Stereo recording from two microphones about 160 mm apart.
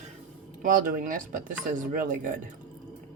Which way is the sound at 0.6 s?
55° right (ahead or behind).